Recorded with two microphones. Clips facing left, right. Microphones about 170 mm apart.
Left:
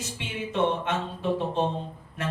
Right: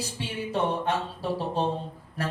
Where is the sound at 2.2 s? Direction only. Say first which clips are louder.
Even; 35° right (ahead or behind).